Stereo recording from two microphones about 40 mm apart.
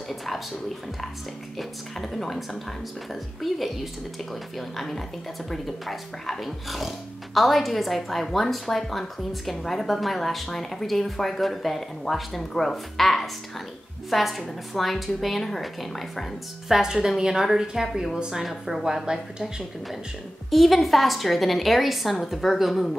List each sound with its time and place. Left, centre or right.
1.6 s a woman's voice: centre
16.8 s a woman's voice: centre
20.4 s a woman's voice: centre